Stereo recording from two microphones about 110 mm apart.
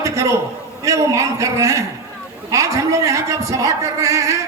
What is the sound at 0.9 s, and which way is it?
A man's voice, 30° right (ahead or behind).